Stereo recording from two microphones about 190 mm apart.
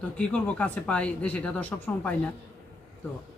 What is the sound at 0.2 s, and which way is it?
Speech, 5° left (ahead or behind).